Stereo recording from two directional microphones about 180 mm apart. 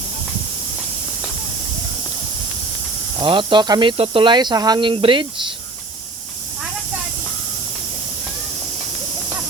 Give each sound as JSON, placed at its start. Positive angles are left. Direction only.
{"t": 3.2, "sound": "speech", "side_deg": -25}